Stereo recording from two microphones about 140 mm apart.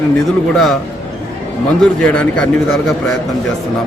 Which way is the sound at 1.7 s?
10° left (ahead or behind).